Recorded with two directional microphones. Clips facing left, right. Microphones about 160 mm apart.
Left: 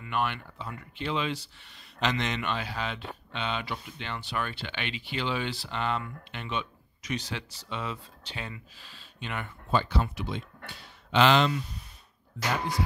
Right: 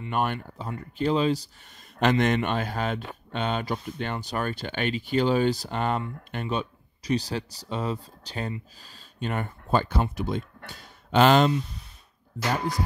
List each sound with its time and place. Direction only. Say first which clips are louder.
0.1 s speech: right 3 dB; 45° right (ahead or behind)
2.0 s speech: right 8 dB; 50° right (ahead or behind)